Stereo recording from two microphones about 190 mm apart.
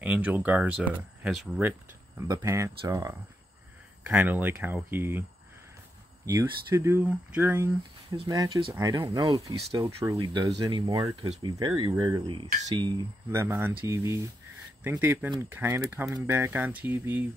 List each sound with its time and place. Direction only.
0.0 s speech: 5° right (ahead or behind)
6.2 s speech: 15° right (ahead or behind)
8.3 s speech: 20° right (ahead or behind)